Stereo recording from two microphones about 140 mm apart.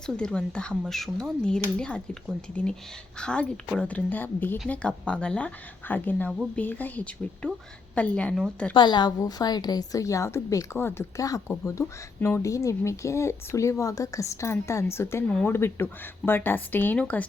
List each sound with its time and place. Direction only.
0.0 s speech: 5° left (ahead or behind)
3.2 s speech: 5° left (ahead or behind)
8.7 s a woman's voice: 35° left (ahead or behind); by 17.2 s 10° left (ahead or behind)